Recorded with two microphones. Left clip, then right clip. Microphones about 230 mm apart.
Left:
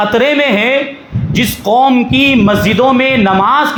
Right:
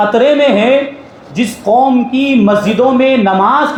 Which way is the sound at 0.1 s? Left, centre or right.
Left.